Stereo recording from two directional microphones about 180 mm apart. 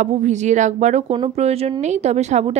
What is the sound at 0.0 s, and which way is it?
Speech, 40° right (ahead or behind).